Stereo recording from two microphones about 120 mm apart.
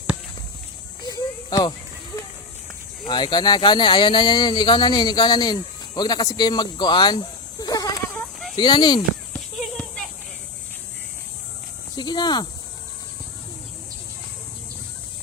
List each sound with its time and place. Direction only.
1.0 s cricket: 30° left (ahead or behind)
3.1 s speech: 40° left (ahead or behind)
9.7 s a sound: 10° left (ahead or behind)
11.9 s cricket: 35° left (ahead or behind)